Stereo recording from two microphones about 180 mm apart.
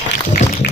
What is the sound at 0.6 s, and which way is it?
Music, 65° left (ahead or behind).